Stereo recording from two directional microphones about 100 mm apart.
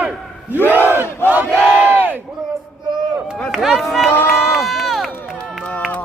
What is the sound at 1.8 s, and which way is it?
Crowd, 20° right (ahead or behind).